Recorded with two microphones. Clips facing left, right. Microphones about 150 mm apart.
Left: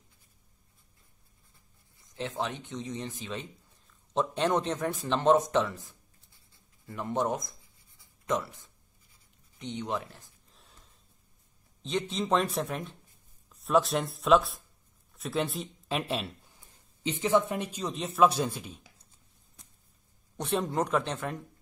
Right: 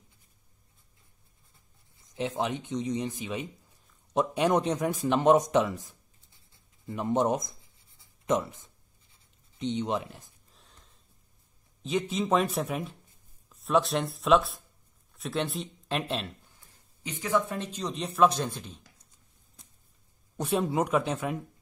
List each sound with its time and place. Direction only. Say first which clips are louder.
2.0 s speech: right 3 dB; 20° right (ahead or behind)
10.5 s snort: left 2 dB; centre (ahead or behind)
11.8 s speech: right 2 dB; 5° right (ahead or behind)
16.5 s speech: left 1 dB; 25° left (ahead or behind)
20.3 s speech: right 2 dB; 5° right (ahead or behind)